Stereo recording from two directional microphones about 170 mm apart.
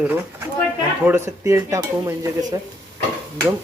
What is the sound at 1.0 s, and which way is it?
Speech, 15° right (ahead or behind).